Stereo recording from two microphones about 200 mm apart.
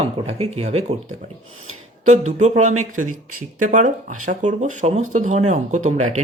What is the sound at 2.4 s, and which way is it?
Speech, 35° right (ahead or behind).